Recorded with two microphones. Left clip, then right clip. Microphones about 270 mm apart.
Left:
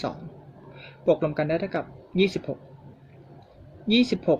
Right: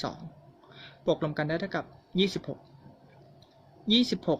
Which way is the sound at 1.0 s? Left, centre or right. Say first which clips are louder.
Left 6 dB; centre.